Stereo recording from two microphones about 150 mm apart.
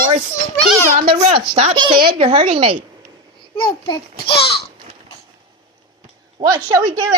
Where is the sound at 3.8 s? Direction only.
35° left (ahead or behind).